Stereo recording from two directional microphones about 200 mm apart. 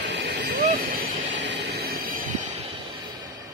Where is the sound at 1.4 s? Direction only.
60° right (ahead or behind).